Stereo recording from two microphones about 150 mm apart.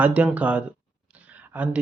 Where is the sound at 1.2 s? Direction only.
10° right (ahead or behind).